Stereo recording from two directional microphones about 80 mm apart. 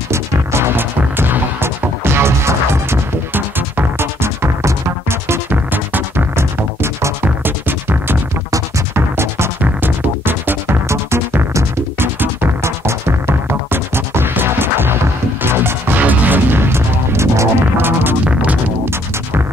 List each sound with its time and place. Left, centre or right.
0.1 s music: right